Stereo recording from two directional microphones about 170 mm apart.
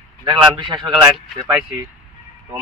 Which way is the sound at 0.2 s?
25° right (ahead or behind).